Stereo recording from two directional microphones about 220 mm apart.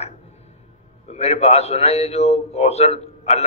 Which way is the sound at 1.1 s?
30° left (ahead or behind).